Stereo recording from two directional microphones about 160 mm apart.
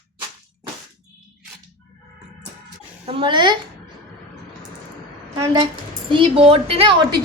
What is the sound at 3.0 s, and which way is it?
Speech, 35° right (ahead or behind).